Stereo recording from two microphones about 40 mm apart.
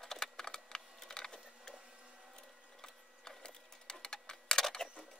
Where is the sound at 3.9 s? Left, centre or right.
Centre.